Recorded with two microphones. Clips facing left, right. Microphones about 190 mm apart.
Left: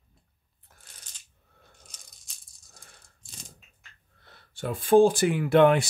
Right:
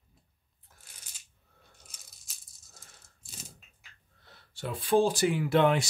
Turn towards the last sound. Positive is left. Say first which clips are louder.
# left 5 dB
turn(degrees=55)  # may be behind; listen again after turning